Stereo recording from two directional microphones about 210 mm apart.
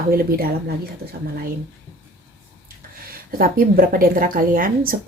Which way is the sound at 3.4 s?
45° right (ahead or behind).